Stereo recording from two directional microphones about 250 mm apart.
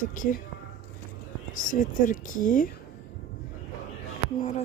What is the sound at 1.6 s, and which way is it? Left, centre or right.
A woman's voice, left.